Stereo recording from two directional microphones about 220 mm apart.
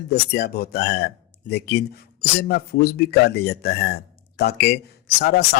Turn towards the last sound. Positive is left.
turn(degrees=45)  # may be behind; listen again after turning